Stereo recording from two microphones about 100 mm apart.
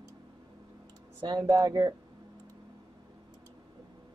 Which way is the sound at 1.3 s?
35° right (ahead or behind).